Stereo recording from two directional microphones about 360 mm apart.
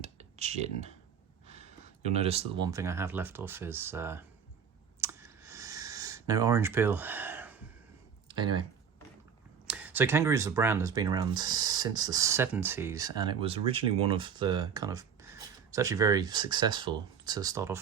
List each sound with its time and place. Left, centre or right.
0.0 s a sound: centre
2.0 s speech: centre
4.9 s clicking: centre
8.3 s speech: centre
9.6 s speech: centre